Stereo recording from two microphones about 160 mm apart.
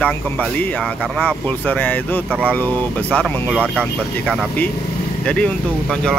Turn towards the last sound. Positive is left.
turn(degrees=5)  # may be behind; listen again after turning